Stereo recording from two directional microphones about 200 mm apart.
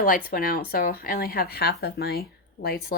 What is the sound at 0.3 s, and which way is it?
A woman's voice, 45° left (ahead or behind).